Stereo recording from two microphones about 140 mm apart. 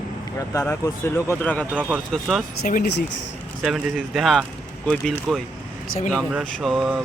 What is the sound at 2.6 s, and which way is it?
Speech, 75° left (ahead or behind).